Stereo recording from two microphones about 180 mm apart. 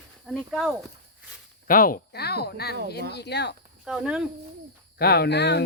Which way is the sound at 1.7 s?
50° left (ahead or behind).